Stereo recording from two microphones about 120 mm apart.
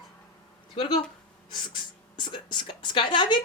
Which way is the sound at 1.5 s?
40° left (ahead or behind).